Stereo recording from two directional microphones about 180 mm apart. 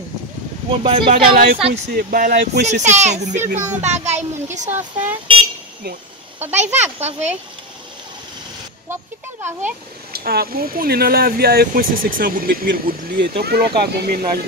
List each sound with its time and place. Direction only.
0.7 s speech: 30° right (ahead or behind)
1.0 s speech: 55° right (ahead or behind)
2.6 s a child's voice: 40° right (ahead or behind)
4.5 s speech: 10° right (ahead or behind)
6.5 s a child's voice: 40° right (ahead or behind)
9.4 s speech: 10° right (ahead or behind)
10.1 s speech: 60° right (ahead or behind)